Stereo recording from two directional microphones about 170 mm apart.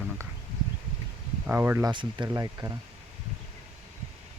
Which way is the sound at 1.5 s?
15° right (ahead or behind).